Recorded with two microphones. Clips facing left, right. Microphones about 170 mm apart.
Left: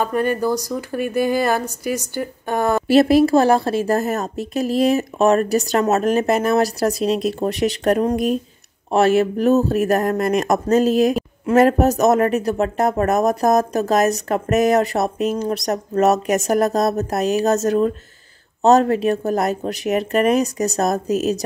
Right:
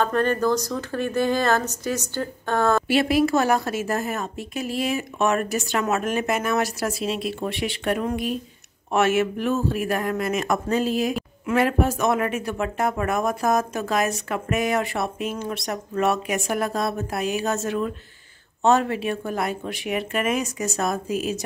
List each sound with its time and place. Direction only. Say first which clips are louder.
0.0 s speech: left 2 dB; 10° left (ahead or behind)
2.9 s speech: left 7 dB; 40° left (ahead or behind)